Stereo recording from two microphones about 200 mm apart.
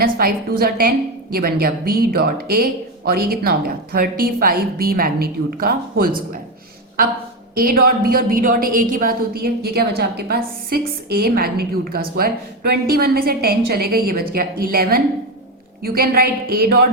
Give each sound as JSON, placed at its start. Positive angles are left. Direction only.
{"t": 0.0, "sound": "a sound", "side_deg": -50}
{"t": 0.6, "sound": "a woman's voice", "side_deg": -50}
{"t": 7.5, "sound": "a woman's voice", "side_deg": -45}